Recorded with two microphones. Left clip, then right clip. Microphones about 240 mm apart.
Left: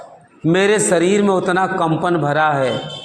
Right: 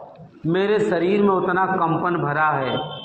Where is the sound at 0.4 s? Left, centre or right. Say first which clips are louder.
Left 5 dB; left.